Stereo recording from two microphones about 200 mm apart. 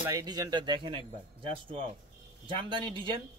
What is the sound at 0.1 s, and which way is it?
Speech, 20° right (ahead or behind).